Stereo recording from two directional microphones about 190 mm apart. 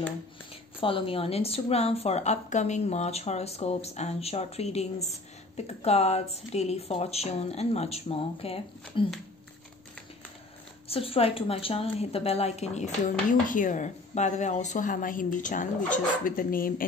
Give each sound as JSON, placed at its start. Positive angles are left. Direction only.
{"t": 0.7, "sound": "a woman's voice", "side_deg": 30}
{"t": 10.9, "sound": "a woman's voice", "side_deg": 30}